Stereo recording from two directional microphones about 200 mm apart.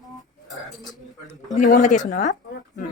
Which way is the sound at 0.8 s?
20° right (ahead or behind).